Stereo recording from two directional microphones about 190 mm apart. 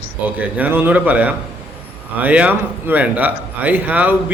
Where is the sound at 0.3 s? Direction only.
10° right (ahead or behind).